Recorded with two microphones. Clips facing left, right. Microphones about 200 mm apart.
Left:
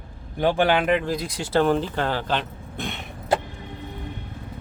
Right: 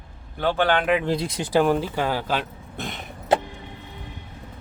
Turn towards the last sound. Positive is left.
turn(degrees=0)  # may be behind; listen again after turning